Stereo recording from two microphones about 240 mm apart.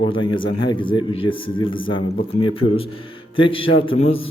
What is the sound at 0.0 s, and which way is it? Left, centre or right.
Speech, centre.